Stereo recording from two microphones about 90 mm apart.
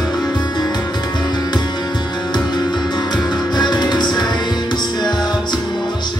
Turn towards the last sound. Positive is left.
turn(degrees=50)  # may be behind; listen again after turning